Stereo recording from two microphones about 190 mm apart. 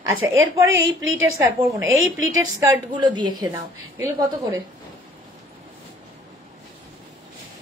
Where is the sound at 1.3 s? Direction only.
15° right (ahead or behind).